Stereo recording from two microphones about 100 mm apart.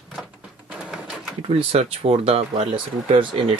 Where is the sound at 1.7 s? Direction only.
90° right.